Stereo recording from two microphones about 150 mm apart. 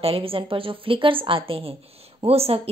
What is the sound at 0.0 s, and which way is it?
A woman's voice, 40° right (ahead or behind).